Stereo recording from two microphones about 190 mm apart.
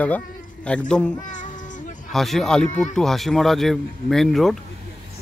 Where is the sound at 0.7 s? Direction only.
5° left (ahead or behind).